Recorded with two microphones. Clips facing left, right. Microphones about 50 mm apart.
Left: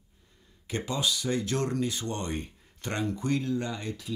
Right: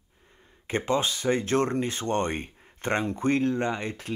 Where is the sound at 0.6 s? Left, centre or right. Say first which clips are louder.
Right 5 dB; right.